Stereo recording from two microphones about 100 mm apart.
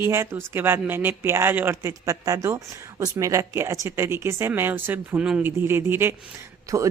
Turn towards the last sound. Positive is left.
turn(degrees=-30)  # may be behind; listen again after turning